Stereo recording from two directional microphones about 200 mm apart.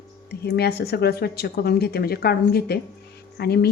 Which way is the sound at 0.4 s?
55° left (ahead or behind).